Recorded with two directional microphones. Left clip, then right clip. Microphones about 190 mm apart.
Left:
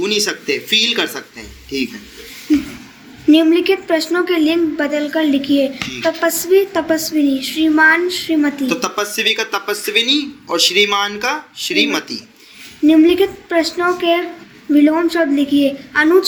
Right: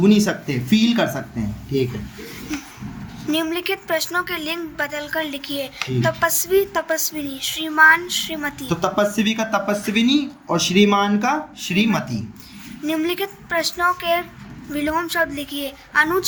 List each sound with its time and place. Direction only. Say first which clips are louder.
0.0 s speech: left 1 dB; 5° left (ahead or behind)
3.2 s a woman's voice: left 11 dB; 60° right (ahead or behind)
8.8 s speech: right 2 dB; 5° left (ahead or behind)
12.8 s a woman's voice: left 12 dB; 65° right (ahead or behind)